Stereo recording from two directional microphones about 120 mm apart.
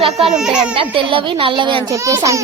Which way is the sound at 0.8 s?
50° right (ahead or behind).